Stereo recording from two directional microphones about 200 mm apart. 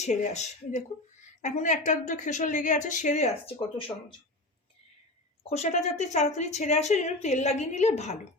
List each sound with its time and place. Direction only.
0.0 s speech: 35° left (ahead or behind)
5.4 s speech: 30° left (ahead or behind)